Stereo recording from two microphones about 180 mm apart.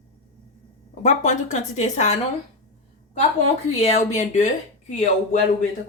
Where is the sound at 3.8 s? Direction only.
35° left (ahead or behind).